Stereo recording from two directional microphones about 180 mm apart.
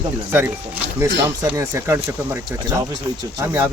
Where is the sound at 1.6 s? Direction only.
15° right (ahead or behind).